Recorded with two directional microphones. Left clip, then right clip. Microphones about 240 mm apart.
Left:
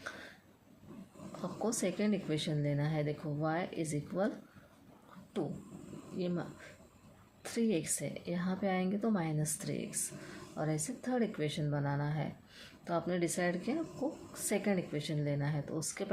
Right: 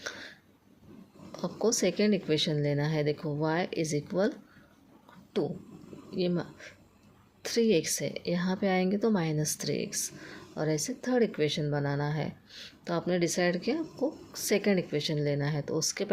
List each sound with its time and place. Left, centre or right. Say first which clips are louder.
1.4 s speech: right 8 dB; right
6.1 s speech: right 8 dB; right
7.4 s speech: right 9 dB; right